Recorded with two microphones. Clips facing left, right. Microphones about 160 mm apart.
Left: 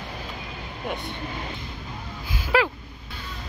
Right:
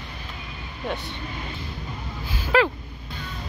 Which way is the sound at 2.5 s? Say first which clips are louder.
Right 2 dB; 10° left (ahead or behind).